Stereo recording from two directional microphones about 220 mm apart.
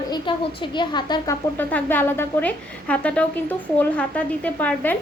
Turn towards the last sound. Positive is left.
turn(degrees=5)  # may be behind; listen again after turning